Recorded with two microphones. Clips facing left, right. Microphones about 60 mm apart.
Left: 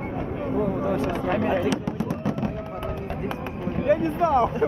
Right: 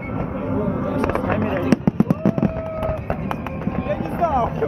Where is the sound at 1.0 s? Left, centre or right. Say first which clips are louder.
Right 4 dB; right.